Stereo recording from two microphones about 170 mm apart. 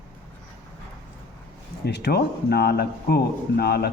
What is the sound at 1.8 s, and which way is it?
A man's voice, 80° left.